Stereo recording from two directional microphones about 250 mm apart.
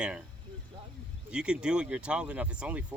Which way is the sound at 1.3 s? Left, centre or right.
Centre.